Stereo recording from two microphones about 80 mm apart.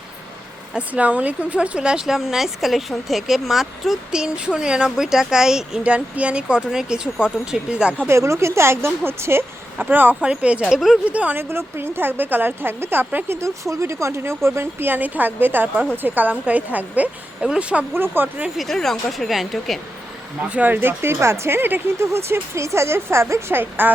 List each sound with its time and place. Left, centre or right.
0.7 s speech: centre
8.0 s speech: right; by 11.0 s centre
11.1 s speech: centre
11.3 s speech: right
17.9 s speech: right
18.5 s speech: centre
20.5 s speech: right